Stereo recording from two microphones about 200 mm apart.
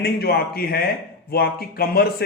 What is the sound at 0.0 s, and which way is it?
A man's voice, 50° left (ahead or behind).